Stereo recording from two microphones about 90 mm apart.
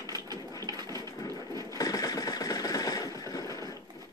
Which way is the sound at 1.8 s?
40° left (ahead or behind).